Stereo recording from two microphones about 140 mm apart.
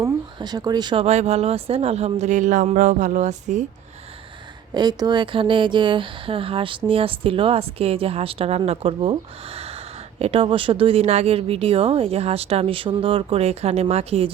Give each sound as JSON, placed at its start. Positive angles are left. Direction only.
{"t": 0.3, "sound": "speech", "side_deg": -30}
{"t": 1.0, "sound": "speech", "side_deg": -50}
{"t": 4.7, "sound": "speech", "side_deg": -30}
{"t": 10.2, "sound": "speech", "side_deg": -45}